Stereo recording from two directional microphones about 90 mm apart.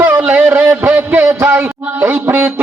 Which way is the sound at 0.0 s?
20° right (ahead or behind).